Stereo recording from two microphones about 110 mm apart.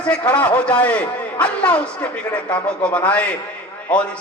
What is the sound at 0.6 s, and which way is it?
A man's voice, 10° left (ahead or behind).